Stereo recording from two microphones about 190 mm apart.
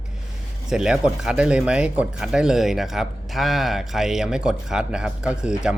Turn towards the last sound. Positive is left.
turn(degrees=-5)  # may be behind; listen again after turning